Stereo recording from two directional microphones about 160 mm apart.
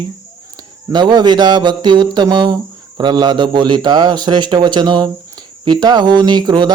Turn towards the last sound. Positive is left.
turn(degrees=-25)  # may be behind; listen again after turning